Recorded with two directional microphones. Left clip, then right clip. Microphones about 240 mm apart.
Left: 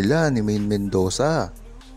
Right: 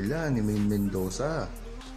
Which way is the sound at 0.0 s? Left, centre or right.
Left.